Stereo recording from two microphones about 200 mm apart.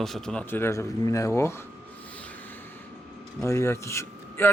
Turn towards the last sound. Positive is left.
turn(degrees=10)  # may be behind; listen again after turning